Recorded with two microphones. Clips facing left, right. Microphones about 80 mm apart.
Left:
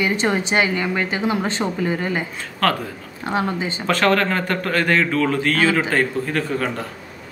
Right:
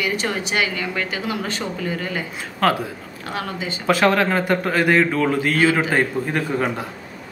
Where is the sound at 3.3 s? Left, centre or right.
Left.